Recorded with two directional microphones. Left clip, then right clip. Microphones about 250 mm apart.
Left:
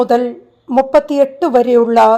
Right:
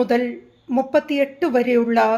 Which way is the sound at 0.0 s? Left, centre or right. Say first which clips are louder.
Left 7 dB; left.